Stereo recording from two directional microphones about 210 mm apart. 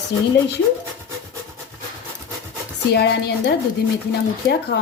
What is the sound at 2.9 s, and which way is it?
Speech, 50° left (ahead or behind).